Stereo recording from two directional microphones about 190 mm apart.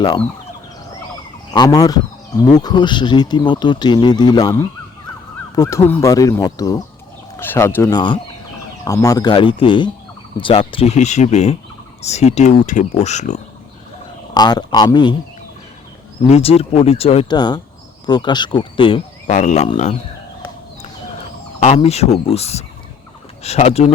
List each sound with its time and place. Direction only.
1.5 s speech: 20° left (ahead or behind); by 13.4 s 40° left (ahead or behind)
14.3 s speech: 20° left (ahead or behind)
16.3 s speech: 30° left (ahead or behind)
19.3 s speech: 40° left (ahead or behind)
21.8 s speech: 35° left (ahead or behind)